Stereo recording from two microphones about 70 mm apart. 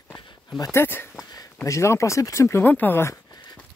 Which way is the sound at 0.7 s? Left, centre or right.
Left.